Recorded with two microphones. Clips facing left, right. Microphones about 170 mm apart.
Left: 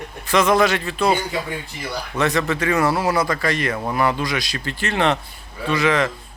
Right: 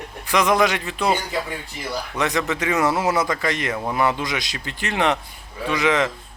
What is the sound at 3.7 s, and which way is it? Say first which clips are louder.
Speech: left 1 dB; 5° right (ahead or behind).